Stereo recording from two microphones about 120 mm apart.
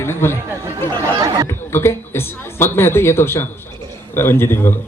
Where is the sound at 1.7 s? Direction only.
20° left (ahead or behind).